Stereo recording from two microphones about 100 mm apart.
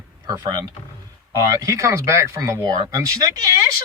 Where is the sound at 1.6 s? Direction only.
30° right (ahead or behind).